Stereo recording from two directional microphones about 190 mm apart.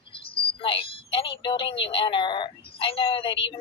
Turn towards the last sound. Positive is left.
turn(degrees=25)  # may be behind; listen again after turning